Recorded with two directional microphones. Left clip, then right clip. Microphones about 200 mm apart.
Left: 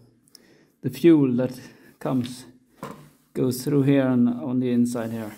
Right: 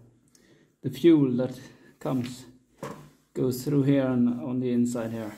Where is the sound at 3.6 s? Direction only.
25° left (ahead or behind).